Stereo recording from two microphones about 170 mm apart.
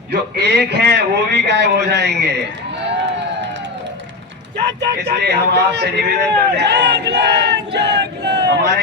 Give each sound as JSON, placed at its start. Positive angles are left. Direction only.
{"t": 0.1, "sound": "a man's voice", "side_deg": -75}
{"t": 4.5, "sound": "a man's voice", "side_deg": -90}